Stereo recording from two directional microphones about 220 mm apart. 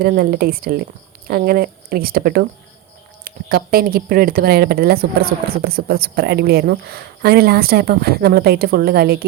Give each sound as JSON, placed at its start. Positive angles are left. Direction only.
{"t": 0.0, "sound": "speech", "side_deg": -40}